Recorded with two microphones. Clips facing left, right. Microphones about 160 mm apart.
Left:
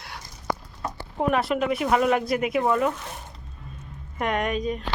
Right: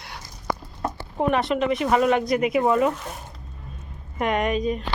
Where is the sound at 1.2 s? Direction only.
Centre (ahead or behind).